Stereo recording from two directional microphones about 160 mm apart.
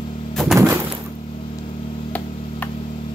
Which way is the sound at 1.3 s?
30° left (ahead or behind).